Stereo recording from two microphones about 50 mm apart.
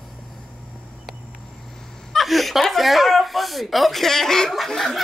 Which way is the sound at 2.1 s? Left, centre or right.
Centre.